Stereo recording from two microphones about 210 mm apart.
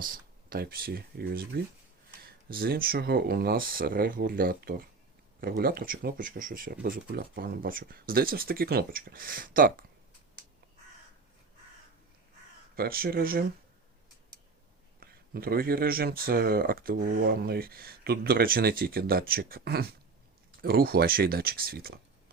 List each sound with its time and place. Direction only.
0.0 s speech: 45° right (ahead or behind)
12.7 s speech: 45° right (ahead or behind)
15.0 s speech: 45° right (ahead or behind)